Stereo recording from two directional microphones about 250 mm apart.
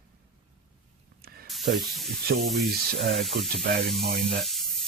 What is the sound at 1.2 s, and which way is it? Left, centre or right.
Spray, right.